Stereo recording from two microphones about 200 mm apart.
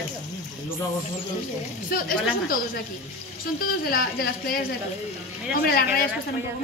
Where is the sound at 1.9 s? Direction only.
45° left (ahead or behind).